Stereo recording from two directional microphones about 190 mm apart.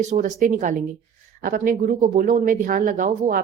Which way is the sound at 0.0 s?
40° right (ahead or behind).